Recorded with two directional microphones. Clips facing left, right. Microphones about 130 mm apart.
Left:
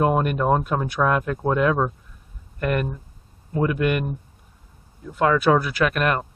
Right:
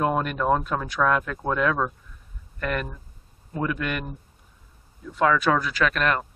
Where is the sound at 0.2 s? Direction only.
20° left (ahead or behind).